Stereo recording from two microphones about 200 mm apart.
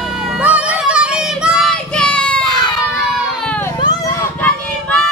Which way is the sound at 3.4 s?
10° left (ahead or behind).